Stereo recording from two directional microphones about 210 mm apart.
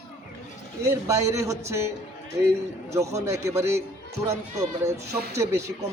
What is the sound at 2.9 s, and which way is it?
Speech, 15° right (ahead or behind).